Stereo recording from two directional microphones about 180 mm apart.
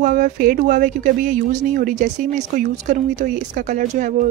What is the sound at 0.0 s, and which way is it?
Speech, 55° right (ahead or behind).